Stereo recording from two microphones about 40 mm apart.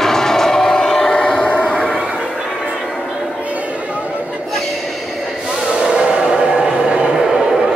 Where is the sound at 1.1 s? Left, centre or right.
Left.